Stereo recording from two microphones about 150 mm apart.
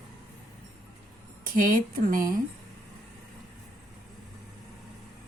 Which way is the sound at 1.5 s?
65° right (ahead or behind).